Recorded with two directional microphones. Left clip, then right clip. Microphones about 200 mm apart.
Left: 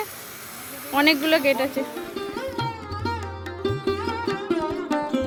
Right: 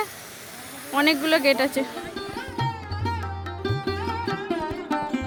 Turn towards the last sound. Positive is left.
turn(degrees=0)  # may be behind; listen again after turning